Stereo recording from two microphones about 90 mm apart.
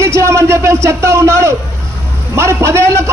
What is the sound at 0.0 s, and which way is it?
A man's voice, 30° right (ahead or behind).